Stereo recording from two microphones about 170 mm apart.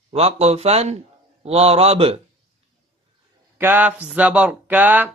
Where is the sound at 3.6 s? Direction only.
10° right (ahead or behind).